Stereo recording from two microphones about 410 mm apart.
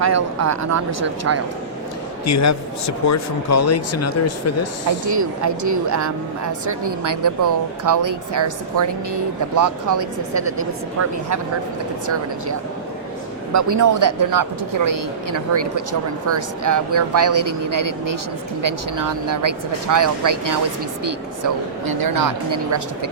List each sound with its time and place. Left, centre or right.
0.0 s speech: right
2.2 s speech: left
5.0 s speech: right
13.5 s speech: right